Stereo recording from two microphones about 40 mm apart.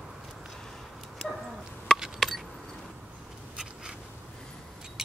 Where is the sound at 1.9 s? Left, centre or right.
Centre.